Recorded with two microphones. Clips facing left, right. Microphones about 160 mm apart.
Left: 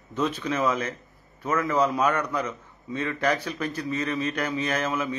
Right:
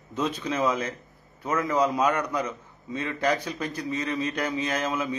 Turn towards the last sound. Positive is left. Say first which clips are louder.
# left 1 dB
turn(degrees=-15)  # may be behind; listen again after turning